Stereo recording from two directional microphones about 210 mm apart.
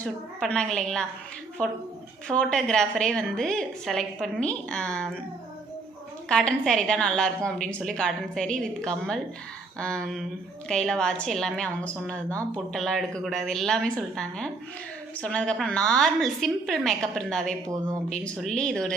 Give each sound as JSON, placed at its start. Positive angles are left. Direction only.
{"t": 0.0, "sound": "a woman's voice", "side_deg": 5}
{"t": 2.2, "sound": "a woman's voice", "side_deg": 5}
{"t": 6.2, "sound": "a woman's voice", "side_deg": 5}